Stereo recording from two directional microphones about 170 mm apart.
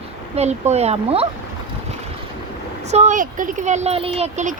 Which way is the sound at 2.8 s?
40° right (ahead or behind).